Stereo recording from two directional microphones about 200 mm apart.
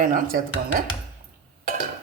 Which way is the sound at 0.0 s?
45° right (ahead or behind).